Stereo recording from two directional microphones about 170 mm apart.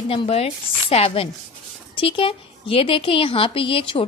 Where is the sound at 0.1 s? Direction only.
35° left (ahead or behind).